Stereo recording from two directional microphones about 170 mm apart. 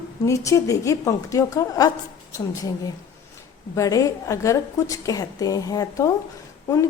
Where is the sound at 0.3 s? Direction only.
20° left (ahead or behind).